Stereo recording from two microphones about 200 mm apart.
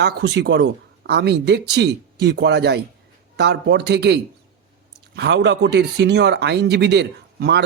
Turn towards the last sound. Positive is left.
turn(degrees=-55)  # may be behind; listen again after turning